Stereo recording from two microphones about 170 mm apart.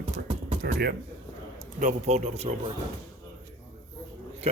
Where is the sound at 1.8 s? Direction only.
45° right (ahead or behind).